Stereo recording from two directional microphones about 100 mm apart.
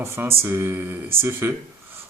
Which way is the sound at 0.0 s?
25° right (ahead or behind).